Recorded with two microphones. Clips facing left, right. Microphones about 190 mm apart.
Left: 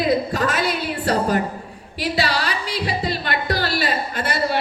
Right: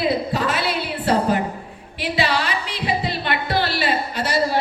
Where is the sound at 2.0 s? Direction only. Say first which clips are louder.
Even; 40° left (ahead or behind).